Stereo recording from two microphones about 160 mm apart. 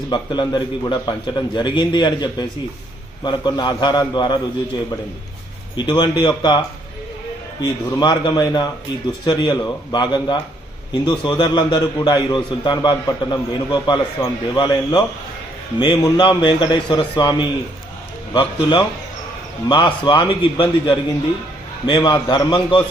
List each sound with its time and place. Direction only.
0.1 s a man's voice: 30° left (ahead or behind)
5.7 s a man's voice: 25° left (ahead or behind)
7.6 s a man's voice: 25° left (ahead or behind)